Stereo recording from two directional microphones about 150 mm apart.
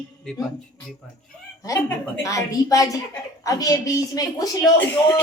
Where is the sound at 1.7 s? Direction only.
25° left (ahead or behind).